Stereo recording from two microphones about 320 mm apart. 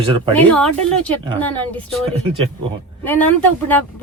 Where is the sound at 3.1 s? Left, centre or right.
Centre.